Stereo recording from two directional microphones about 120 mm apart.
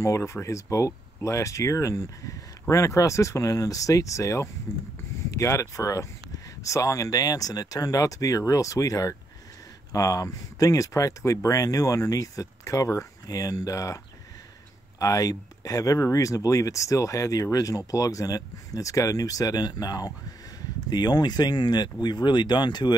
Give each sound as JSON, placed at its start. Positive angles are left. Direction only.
{"t": 0.0, "sound": "speech", "side_deg": 25}